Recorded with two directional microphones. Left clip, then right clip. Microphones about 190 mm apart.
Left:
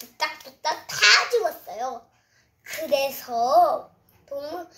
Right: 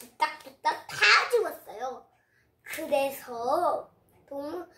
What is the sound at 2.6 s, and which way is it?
Speech, 20° right (ahead or behind).